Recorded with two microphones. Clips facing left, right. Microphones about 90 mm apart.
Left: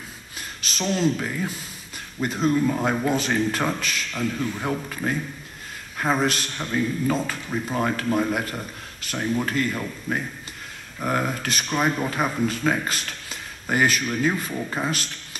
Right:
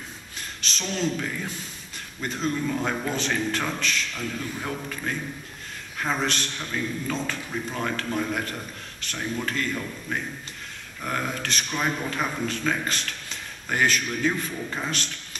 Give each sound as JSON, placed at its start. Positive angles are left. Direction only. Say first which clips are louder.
{"t": 0.4, "sound": "a sound", "louder": "left 4 dB", "side_deg": 5}
{"t": 0.9, "sound": "speech", "louder": "left 3 dB", "side_deg": 5}
{"t": 2.6, "sound": "speech", "louder": "left 4 dB", "side_deg": 15}
{"t": 4.4, "sound": "a man's voice", "louder": "left 5 dB", "side_deg": 20}